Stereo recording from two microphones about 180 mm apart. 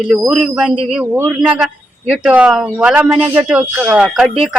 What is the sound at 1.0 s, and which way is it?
Speech, 10° right (ahead or behind).